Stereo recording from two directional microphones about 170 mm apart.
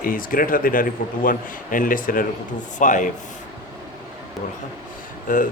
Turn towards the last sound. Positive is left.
turn(degrees=55)  # may be behind; listen again after turning